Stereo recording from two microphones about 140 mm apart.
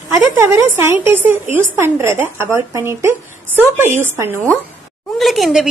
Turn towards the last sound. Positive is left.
turn(degrees=0)  # may be behind; listen again after turning